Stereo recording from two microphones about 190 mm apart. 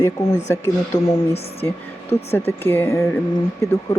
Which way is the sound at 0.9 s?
20° left (ahead or behind).